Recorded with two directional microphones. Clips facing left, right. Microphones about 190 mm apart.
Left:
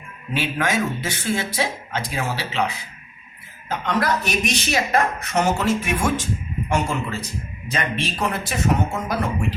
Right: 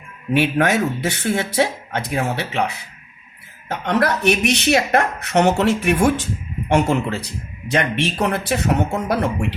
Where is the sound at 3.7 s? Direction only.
60° right (ahead or behind).